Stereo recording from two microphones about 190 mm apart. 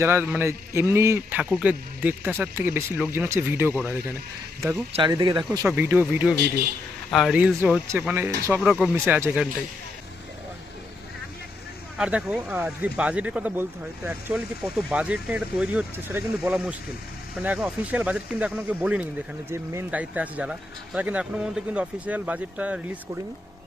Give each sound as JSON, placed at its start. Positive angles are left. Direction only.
{"t": 0.0, "sound": "speech", "side_deg": -10}
{"t": 4.9, "sound": "speech", "side_deg": -30}
{"t": 5.1, "sound": "speech", "side_deg": -20}
{"t": 7.1, "sound": "speech", "side_deg": 0}
{"t": 11.9, "sound": "speech", "side_deg": -5}